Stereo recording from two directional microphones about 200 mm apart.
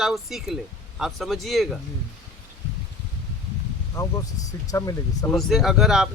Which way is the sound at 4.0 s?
15° left (ahead or behind).